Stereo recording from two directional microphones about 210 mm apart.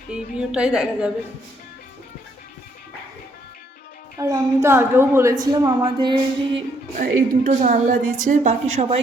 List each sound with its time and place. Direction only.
0.1 s a woman's voice: 5° right (ahead or behind)
4.2 s a woman's voice: 15° right (ahead or behind)
7.0 s a woman's voice: 35° right (ahead or behind)